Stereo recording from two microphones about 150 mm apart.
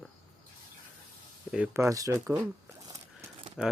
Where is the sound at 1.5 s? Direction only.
15° right (ahead or behind).